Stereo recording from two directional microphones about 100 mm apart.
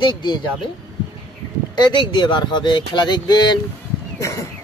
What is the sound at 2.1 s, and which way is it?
Speech, 50° left (ahead or behind).